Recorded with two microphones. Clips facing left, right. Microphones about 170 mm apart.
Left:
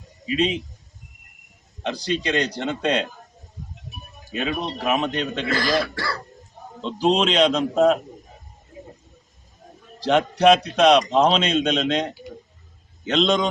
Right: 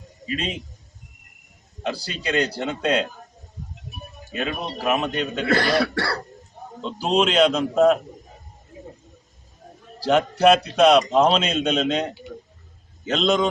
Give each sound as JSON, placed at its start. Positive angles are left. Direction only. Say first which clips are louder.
{"t": 0.3, "sound": "a man's voice", "louder": "left 6 dB", "side_deg": 0}
{"t": 1.8, "sound": "a man's voice", "louder": "left 3 dB", "side_deg": -5}
{"t": 4.4, "sound": "a man's voice", "louder": "left 2 dB", "side_deg": -5}
{"t": 5.5, "sound": "cough", "louder": "right 3 dB", "side_deg": -65}
{"t": 6.8, "sound": "a man's voice", "louder": "left 1 dB", "side_deg": -5}
{"t": 10.0, "sound": "a man's voice", "louder": "even", "side_deg": -5}